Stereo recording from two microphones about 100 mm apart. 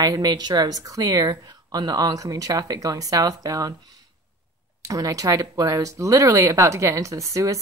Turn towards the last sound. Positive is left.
turn(degrees=-35)  # may be behind; listen again after turning